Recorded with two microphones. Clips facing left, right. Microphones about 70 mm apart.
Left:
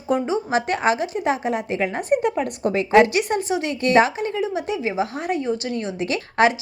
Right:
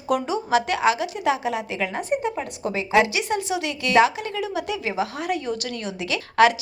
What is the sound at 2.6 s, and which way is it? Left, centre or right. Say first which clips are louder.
A woman's voice: left 4 dB; left.